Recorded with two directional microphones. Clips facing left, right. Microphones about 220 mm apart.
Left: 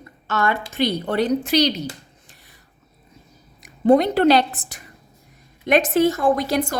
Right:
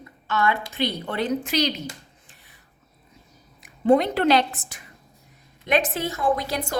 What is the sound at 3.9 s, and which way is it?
A woman's voice, 35° left (ahead or behind).